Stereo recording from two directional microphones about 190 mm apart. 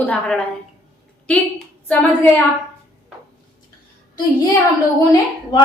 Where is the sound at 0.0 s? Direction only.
5° left (ahead or behind).